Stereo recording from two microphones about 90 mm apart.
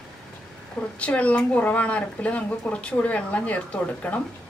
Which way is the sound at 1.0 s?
15° left (ahead or behind).